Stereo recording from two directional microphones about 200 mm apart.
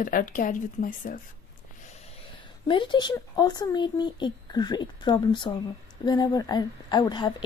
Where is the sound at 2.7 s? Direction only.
25° left (ahead or behind).